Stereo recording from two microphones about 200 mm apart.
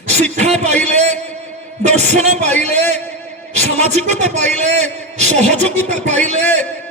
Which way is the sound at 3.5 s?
35° right (ahead or behind).